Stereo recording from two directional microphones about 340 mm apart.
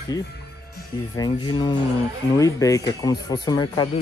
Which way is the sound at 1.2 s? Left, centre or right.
Centre.